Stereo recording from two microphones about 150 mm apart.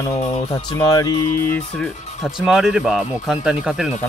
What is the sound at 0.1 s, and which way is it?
Speech, 45° left (ahead or behind).